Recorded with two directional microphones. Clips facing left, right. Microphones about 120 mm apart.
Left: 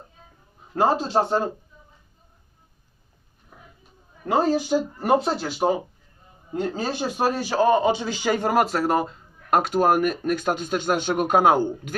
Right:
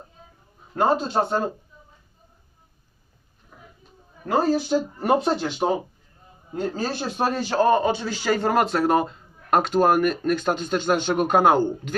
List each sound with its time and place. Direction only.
0.8 s a man's voice: 30° left (ahead or behind)
4.3 s a man's voice: 15° left (ahead or behind)
5.0 s speech: centre (ahead or behind)
6.6 s a man's voice: 15° left (ahead or behind)